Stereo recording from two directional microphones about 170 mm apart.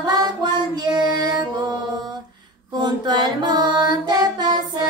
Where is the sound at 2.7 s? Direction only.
25° right (ahead or behind).